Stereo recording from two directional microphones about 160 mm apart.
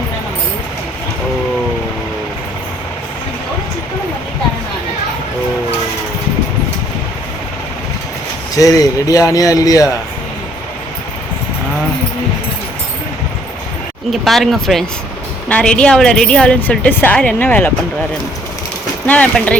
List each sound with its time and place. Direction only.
8.5 s a man's voice: 20° left (ahead or behind)
14.1 s a woman's voice: centre (ahead or behind)
19.0 s a woman's voice: 10° left (ahead or behind)